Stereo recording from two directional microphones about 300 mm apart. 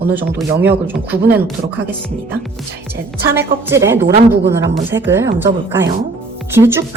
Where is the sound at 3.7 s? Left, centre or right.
Centre.